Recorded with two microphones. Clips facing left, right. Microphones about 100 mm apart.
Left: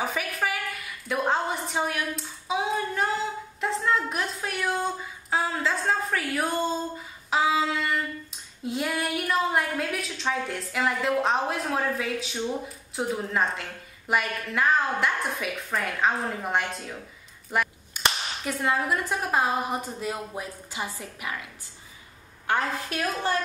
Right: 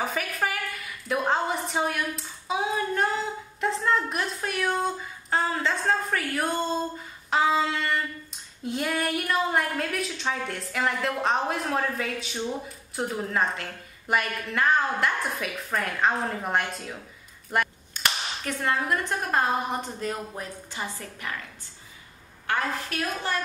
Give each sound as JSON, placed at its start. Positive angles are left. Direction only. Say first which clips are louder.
{"t": 0.0, "sound": "a woman's voice", "louder": "even", "side_deg": 0}
{"t": 17.9, "sound": "a sound", "louder": "left 2 dB", "side_deg": 10}
{"t": 18.4, "sound": "a woman's voice", "louder": "left 1 dB", "side_deg": 10}
{"t": 22.5, "sound": "a woman's voice", "louder": "left 1 dB", "side_deg": 25}